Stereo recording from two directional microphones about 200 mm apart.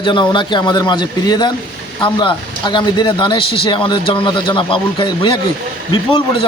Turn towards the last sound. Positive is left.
turn(degrees=25)  # may be behind; listen again after turning